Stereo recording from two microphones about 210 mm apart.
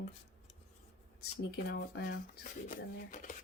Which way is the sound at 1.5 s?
50° left (ahead or behind).